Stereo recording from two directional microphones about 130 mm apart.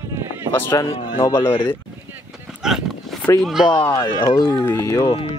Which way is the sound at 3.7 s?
40° left (ahead or behind).